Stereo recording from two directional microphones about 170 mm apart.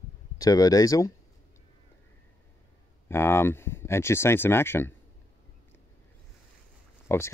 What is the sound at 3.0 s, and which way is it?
Speech, 15° left (ahead or behind).